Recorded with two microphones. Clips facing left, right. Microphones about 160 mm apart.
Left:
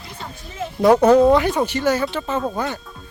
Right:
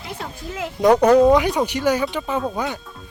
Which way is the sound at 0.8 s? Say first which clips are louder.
Left 1 dB; 5° left (ahead or behind).